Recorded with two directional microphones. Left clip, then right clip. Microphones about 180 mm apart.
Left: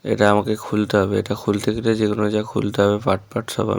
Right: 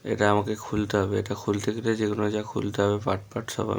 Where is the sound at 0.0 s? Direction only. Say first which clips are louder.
Left 6 dB; 35° left (ahead or behind).